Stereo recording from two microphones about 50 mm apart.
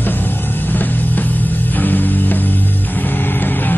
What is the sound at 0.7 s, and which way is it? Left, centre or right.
Music, left.